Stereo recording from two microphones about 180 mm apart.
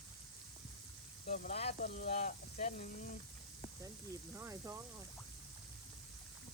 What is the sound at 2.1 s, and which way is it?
Speech, 50° left (ahead or behind).